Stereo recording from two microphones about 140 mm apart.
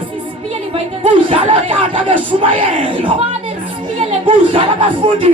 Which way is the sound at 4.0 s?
40° right (ahead or behind).